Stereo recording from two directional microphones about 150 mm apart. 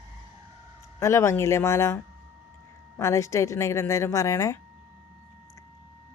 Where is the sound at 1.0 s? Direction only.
20° left (ahead or behind).